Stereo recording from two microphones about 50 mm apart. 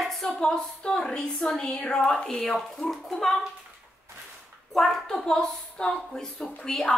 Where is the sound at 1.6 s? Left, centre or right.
Left.